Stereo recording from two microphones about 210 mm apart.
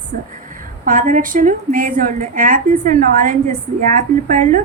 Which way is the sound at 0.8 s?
40° right (ahead or behind).